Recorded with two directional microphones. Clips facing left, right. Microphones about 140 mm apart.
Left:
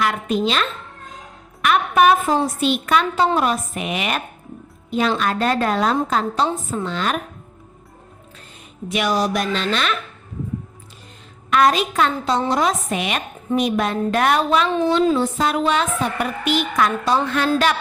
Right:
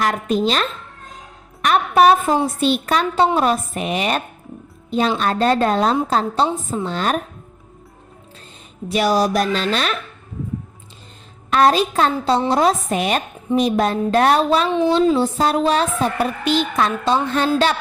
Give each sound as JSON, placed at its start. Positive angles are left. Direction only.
{"t": 0.0, "sound": "a woman's voice", "side_deg": -40}
{"t": 8.9, "sound": "a woman's voice", "side_deg": -35}
{"t": 11.5, "sound": "a woman's voice", "side_deg": -30}